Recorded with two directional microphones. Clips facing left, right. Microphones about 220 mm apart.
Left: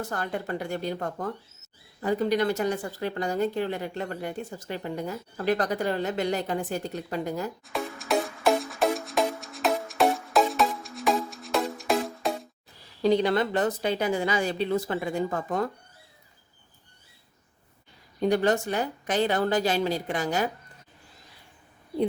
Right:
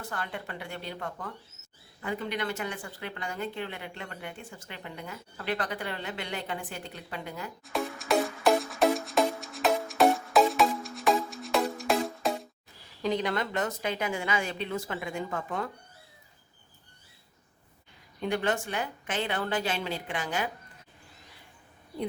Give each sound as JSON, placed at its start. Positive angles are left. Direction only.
{"t": 0.0, "sound": "a woman's voice", "side_deg": 40}
{"t": 7.6, "sound": "music", "side_deg": 0}
{"t": 13.0, "sound": "speech", "side_deg": 35}
{"t": 18.2, "sound": "speech", "side_deg": 40}